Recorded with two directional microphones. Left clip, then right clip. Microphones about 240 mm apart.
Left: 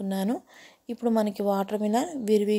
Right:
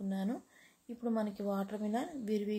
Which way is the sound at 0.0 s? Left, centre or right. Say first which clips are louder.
Left 10 dB; left.